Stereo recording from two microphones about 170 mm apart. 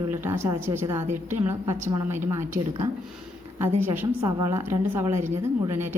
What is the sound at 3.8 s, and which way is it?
A woman's voice, 10° right (ahead or behind).